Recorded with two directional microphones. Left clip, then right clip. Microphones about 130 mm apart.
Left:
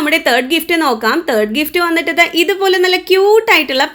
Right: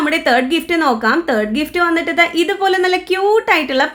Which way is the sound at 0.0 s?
20° left (ahead or behind).